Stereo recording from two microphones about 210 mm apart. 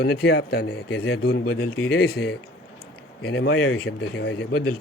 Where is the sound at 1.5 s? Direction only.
85° left.